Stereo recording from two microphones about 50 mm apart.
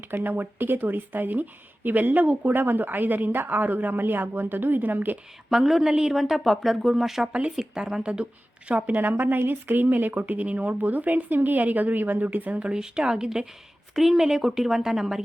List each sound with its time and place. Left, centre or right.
0.1 s a woman's voice: right
5.5 s a woman's voice: centre; by 12.7 s right
12.7 s a woman's voice: centre
13.9 s a woman's voice: centre